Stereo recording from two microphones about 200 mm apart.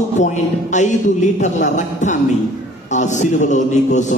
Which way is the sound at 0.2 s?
35° left (ahead or behind).